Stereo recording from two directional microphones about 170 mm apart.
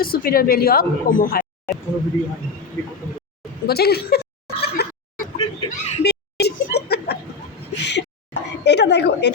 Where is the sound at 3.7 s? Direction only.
65° left (ahead or behind).